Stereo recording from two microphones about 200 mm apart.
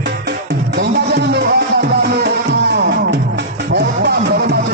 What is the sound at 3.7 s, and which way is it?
Music, 55° right (ahead or behind).